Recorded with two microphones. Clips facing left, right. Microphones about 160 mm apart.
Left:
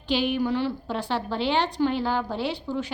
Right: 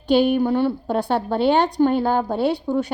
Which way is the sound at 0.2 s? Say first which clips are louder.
Right 7 dB; 55° right (ahead or behind).